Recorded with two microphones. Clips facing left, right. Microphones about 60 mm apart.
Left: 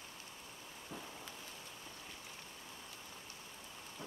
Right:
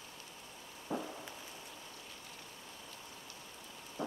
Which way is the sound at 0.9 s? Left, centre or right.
Right.